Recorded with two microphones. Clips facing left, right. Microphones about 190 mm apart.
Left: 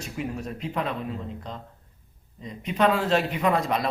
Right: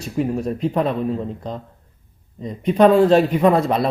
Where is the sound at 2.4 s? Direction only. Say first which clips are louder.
Right 9 dB; 40° right (ahead or behind).